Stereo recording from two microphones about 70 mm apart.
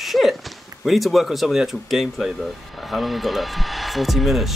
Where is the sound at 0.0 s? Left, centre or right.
Centre.